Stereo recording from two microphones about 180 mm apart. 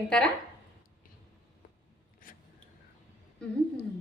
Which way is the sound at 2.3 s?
50° left (ahead or behind).